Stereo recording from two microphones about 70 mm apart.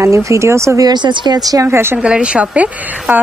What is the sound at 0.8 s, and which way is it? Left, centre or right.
Speech, right.